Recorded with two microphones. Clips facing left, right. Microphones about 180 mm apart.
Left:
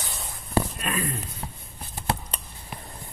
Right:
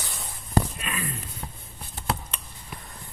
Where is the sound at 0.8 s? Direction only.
40° left (ahead or behind).